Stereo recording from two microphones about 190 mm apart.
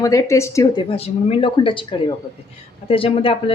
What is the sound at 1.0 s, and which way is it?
Speech, 30° left (ahead or behind).